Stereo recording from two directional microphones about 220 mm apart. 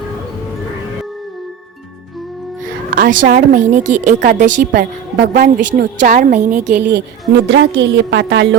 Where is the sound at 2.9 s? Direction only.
40° right (ahead or behind).